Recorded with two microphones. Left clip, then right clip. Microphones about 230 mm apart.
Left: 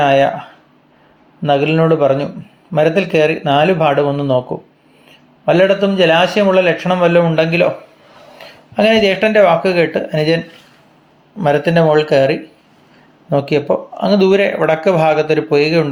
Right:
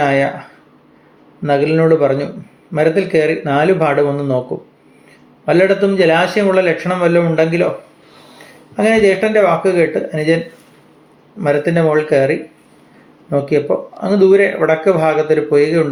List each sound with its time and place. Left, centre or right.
0.0 s a sound: left
1.4 s speech: left
5.5 s speech: left
8.7 s speech: left